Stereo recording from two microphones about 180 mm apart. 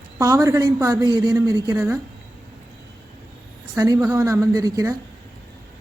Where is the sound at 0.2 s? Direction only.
15° right (ahead or behind).